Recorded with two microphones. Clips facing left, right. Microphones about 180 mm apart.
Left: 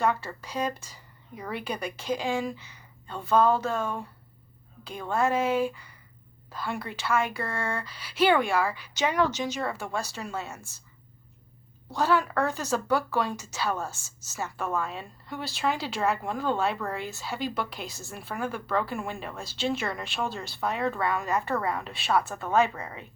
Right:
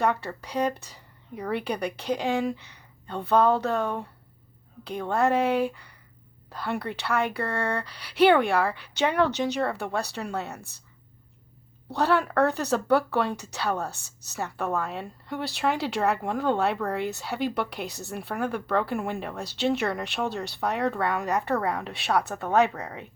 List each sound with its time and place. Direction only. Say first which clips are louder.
0.0 s speech: right 1 dB; 65° right (ahead or behind)
11.9 s speech: right 1 dB; 60° right (ahead or behind)